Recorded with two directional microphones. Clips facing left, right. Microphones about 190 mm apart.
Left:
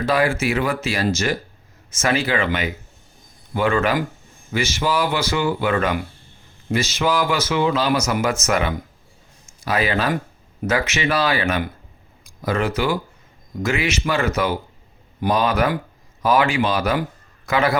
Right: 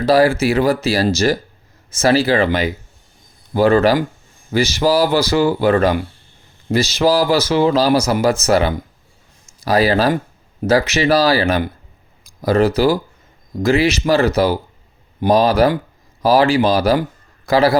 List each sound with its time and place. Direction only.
0.0 s a man's voice: 35° right (ahead or behind)